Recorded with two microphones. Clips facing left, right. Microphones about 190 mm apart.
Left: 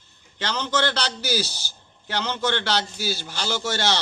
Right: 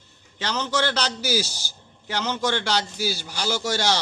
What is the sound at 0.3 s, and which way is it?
A man's voice, 5° right (ahead or behind).